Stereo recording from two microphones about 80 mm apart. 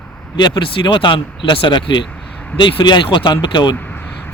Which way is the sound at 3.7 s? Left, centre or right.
Left.